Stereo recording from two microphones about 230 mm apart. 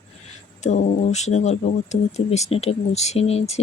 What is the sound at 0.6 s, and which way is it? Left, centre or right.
Speech, left.